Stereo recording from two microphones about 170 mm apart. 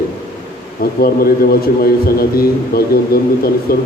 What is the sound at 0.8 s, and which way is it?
A man's voice, 60° left (ahead or behind).